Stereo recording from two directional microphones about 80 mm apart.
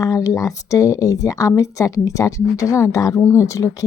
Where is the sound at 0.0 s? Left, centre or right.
Left.